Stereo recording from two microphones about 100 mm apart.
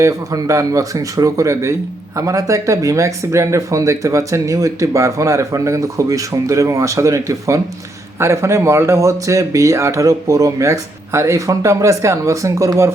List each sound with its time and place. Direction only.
0.0 s speech: 35° right (ahead or behind)